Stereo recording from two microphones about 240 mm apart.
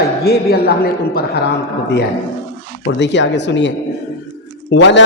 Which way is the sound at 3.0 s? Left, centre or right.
Left.